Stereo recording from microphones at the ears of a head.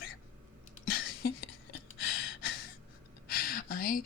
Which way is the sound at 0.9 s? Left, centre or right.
Left.